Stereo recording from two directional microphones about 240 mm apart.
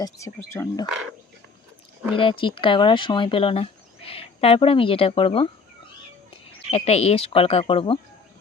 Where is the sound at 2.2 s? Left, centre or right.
Left.